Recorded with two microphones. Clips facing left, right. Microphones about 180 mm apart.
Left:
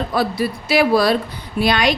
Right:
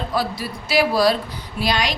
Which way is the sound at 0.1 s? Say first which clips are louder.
Left 5 dB; 55° left (ahead or behind).